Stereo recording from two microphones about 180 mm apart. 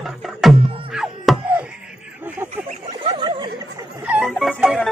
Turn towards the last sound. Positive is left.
turn(degrees=0)  # may be behind; listen again after turning